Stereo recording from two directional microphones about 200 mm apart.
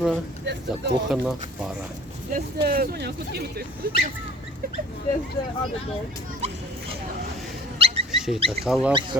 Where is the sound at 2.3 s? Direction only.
50° right (ahead or behind).